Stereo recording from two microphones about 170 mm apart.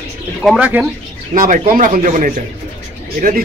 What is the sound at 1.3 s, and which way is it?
Speech, 55° right (ahead or behind).